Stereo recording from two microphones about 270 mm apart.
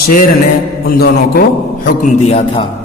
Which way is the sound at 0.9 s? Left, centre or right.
Left.